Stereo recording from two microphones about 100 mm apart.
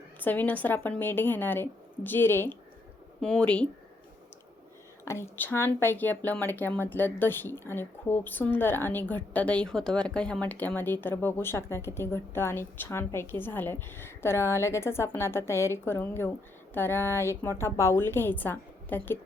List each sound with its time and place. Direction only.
0.2 s speech: 15° left (ahead or behind)
3.2 s speech: 5° left (ahead or behind)
5.0 s speech: 25° left (ahead or behind)